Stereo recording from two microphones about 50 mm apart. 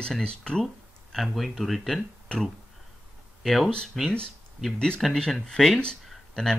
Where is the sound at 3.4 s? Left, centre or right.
Centre.